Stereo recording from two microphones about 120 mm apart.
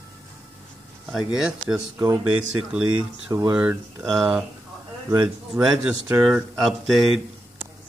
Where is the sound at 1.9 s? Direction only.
35° right (ahead or behind).